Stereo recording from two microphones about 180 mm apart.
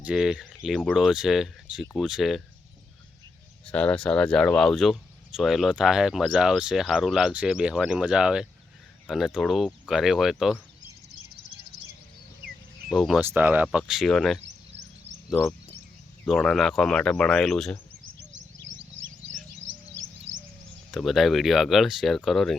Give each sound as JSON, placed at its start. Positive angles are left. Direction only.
{"t": 0.0, "sound": "speech", "side_deg": -5}
{"t": 3.7, "sound": "speech", "side_deg": 5}
{"t": 12.9, "sound": "speech", "side_deg": 0}
{"t": 13.2, "sound": "speech", "side_deg": -10}
{"t": 18.2, "sound": "bird", "side_deg": -90}
{"t": 20.3, "sound": "a sound", "side_deg": -90}
{"t": 20.9, "sound": "speech", "side_deg": 0}